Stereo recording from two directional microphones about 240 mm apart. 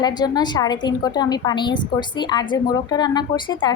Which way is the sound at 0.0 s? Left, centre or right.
Centre.